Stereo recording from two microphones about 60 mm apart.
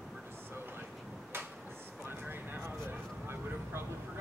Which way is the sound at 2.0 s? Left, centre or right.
Right.